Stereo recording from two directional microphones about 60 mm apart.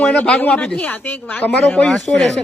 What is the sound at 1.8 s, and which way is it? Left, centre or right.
Speech, centre.